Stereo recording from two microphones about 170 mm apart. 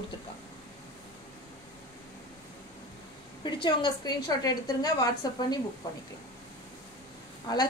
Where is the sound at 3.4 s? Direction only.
25° left (ahead or behind).